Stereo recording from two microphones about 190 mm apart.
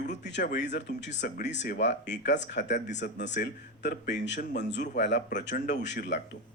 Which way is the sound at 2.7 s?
40° left (ahead or behind).